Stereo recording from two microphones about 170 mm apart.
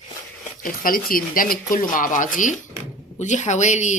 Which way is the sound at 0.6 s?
55° left (ahead or behind).